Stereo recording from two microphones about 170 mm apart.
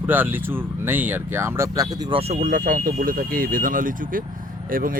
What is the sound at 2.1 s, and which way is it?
Speech, 35° right (ahead or behind).